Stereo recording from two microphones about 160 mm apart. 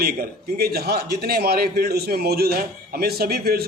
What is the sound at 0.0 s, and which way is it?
A man's voice, 70° right (ahead or behind).